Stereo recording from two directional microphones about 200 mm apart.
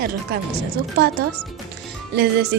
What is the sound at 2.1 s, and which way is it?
Speech, 55° right (ahead or behind).